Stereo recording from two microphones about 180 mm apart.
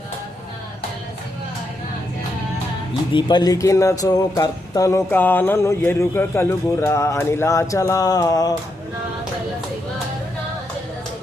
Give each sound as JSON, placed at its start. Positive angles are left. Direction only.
{"t": 3.1, "sound": "speech", "side_deg": 25}